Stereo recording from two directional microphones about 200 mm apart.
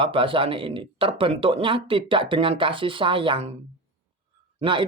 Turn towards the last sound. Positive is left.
turn(degrees=-25)  # may be behind; listen again after turning